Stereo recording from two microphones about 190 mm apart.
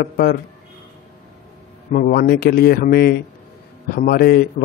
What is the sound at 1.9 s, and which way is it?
A man's voice, 50° left (ahead or behind).